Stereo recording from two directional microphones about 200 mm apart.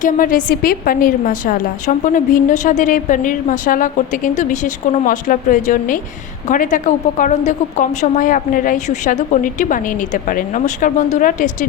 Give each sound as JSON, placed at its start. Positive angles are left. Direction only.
{"t": 0.0, "sound": "a woman's voice", "side_deg": 40}